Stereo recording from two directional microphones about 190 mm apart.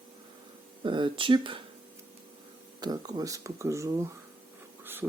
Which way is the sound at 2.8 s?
20° right (ahead or behind).